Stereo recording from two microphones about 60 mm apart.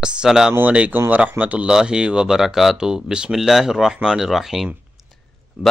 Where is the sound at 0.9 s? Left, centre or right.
Right.